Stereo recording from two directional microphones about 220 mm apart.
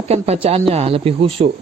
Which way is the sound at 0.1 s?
30° right (ahead or behind).